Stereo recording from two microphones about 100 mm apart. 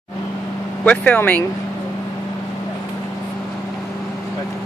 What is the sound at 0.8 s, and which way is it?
Speech, 15° left (ahead or behind).